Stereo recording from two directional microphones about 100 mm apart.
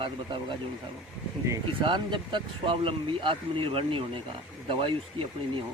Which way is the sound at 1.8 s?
50° right (ahead or behind).